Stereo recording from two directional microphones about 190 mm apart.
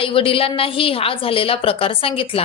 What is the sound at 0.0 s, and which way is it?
Speech, 30° left (ahead or behind).